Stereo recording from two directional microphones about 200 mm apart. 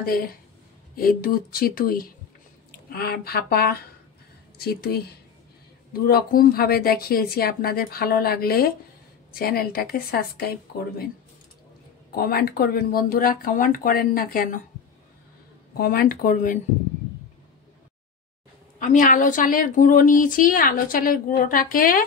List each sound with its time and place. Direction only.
0.0 s a woman's voice: 45° left (ahead or behind)
6.0 s a woman's voice: 50° left (ahead or behind)
12.1 s a woman's voice: 50° left (ahead or behind)
15.8 s a woman's voice: 50° left (ahead or behind)
18.8 s a woman's voice: 40° left (ahead or behind)